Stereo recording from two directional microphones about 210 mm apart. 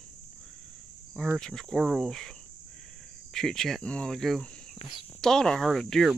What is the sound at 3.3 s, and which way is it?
Speech, centre (ahead or behind).